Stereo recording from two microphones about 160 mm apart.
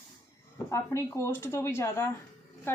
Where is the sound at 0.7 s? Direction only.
15° left (ahead or behind).